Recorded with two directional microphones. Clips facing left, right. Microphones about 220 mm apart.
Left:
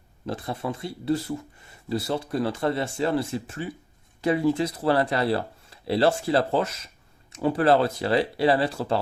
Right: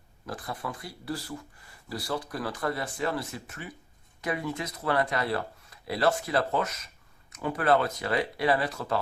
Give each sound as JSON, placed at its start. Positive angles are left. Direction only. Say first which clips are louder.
{"t": 0.3, "sound": "speech", "louder": "left 6 dB", "side_deg": 25}